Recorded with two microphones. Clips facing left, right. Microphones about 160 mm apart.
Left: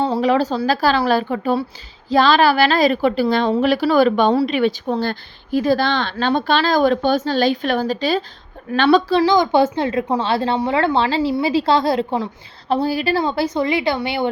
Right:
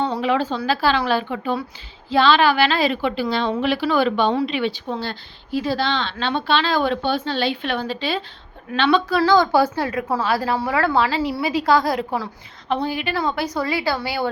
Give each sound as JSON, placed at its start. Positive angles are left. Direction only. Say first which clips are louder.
{"t": 0.0, "sound": "a woman's voice", "louder": "left 4 dB", "side_deg": 35}
{"t": 9.2, "sound": "a woman's voice", "louder": "left 1 dB", "side_deg": 15}